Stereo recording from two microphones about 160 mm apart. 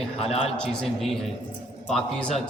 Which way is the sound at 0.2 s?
40° left (ahead or behind).